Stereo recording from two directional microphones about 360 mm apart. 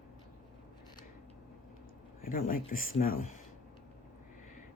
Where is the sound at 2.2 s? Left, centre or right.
Left.